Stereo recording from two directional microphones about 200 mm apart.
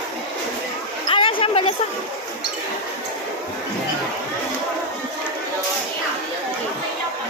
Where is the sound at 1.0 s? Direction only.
25° left (ahead or behind).